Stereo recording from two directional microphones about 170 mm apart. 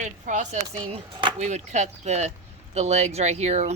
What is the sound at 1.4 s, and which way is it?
Speech, 45° right (ahead or behind).